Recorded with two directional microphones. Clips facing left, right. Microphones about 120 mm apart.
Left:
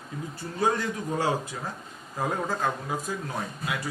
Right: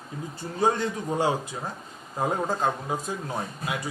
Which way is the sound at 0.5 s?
25° right (ahead or behind).